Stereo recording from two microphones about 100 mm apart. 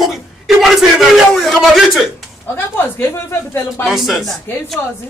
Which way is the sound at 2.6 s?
20° left (ahead or behind).